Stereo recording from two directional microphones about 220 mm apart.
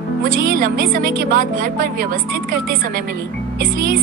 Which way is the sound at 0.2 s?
40° right (ahead or behind).